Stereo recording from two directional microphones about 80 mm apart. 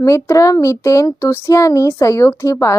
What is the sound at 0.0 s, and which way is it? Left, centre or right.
A woman's voice, left.